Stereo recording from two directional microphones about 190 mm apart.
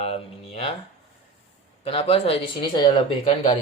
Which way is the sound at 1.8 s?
30° left (ahead or behind).